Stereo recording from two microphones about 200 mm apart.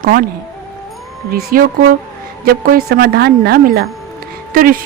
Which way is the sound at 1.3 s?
45° right (ahead or behind).